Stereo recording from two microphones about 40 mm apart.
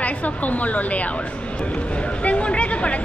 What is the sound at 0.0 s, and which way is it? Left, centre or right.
A woman's voice, left.